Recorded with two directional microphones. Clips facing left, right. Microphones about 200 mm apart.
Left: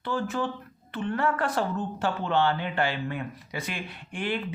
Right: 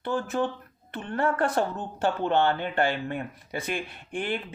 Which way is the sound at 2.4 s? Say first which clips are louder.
Left 1 dB; 50° right (ahead or behind).